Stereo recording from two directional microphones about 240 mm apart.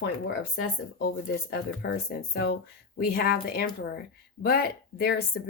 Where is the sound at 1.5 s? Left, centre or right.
Left.